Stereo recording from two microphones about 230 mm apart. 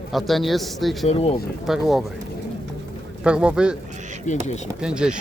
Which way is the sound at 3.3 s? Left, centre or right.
Centre.